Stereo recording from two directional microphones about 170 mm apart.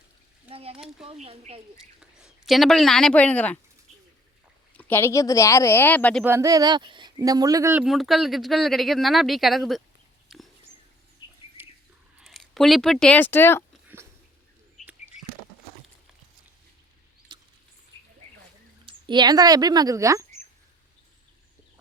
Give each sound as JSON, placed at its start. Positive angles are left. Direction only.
{"t": 0.4, "sound": "speech", "side_deg": -35}
{"t": 1.8, "sound": "speech", "side_deg": 0}
{"t": 4.8, "sound": "speech", "side_deg": 15}
{"t": 6.2, "sound": "speech", "side_deg": -15}
{"t": 7.9, "sound": "speech", "side_deg": 0}
{"t": 10.2, "sound": "a sound", "side_deg": 0}
{"t": 11.2, "sound": "bird flight", "side_deg": 25}
{"t": 11.6, "sound": "a sound", "side_deg": -10}
{"t": 12.2, "sound": "speech", "side_deg": 0}
{"t": 13.8, "sound": "a sound", "side_deg": -15}
{"t": 17.3, "sound": "rodents", "side_deg": -30}
{"t": 18.9, "sound": "speech", "side_deg": -25}